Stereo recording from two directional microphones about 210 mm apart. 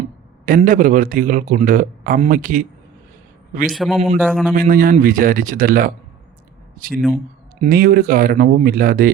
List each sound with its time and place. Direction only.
0.4 s a man's voice: 40° right (ahead or behind)
3.7 s a man's voice: centre (ahead or behind)
4.5 s a man's voice: 40° right (ahead or behind)